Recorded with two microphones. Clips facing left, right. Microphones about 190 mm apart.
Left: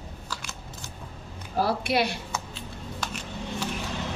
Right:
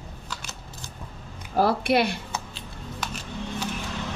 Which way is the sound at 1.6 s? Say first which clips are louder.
Right 4 dB; 55° right (ahead or behind).